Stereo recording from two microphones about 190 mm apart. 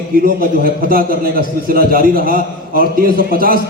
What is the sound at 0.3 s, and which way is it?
A man's voice, 50° right (ahead or behind).